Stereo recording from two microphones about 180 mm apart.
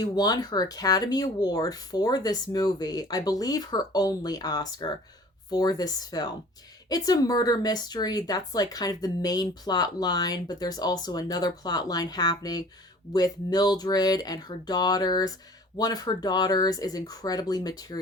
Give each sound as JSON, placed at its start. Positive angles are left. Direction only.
{"t": 0.0, "sound": "speech", "side_deg": 20}